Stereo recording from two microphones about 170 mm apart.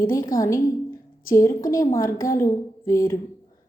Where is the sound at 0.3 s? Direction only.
20° left (ahead or behind).